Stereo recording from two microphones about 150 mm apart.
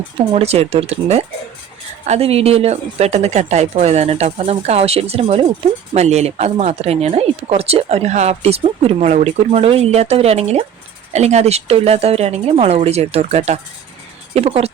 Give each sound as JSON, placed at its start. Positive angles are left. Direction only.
{"t": 0.2, "sound": "speech", "side_deg": -40}